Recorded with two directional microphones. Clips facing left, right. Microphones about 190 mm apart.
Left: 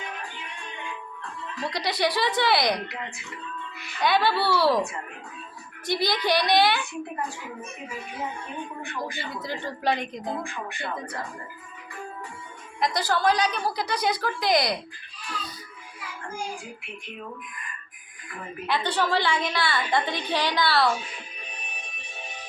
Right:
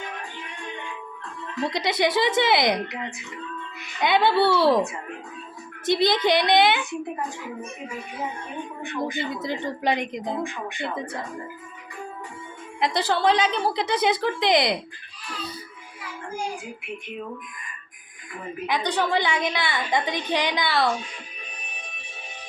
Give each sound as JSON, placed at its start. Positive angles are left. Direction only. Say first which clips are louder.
{"t": 1.6, "sound": "speech", "louder": "right 3 dB", "side_deg": -20}
{"t": 4.0, "sound": "speech", "louder": "right 3 dB", "side_deg": -20}
{"t": 8.8, "sound": "speech", "louder": "right 5 dB", "side_deg": -20}
{"t": 12.8, "sound": "speech", "louder": "right 2 dB", "side_deg": -25}
{"t": 18.7, "sound": "speech", "louder": "right 1 dB", "side_deg": -15}